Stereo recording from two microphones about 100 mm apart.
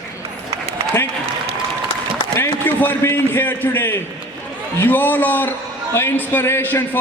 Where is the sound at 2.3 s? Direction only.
20° left (ahead or behind).